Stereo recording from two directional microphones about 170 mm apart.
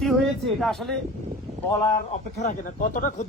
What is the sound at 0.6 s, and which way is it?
Speech, centre (ahead or behind).